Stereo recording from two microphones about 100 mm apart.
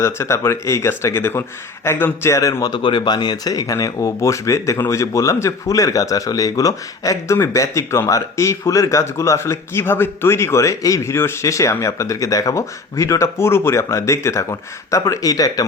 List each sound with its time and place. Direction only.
0.0 s speech: 25° left (ahead or behind)
2.3 s speech: 35° left (ahead or behind)